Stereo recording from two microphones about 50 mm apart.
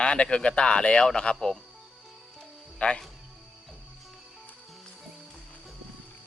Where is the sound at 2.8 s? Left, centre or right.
Left.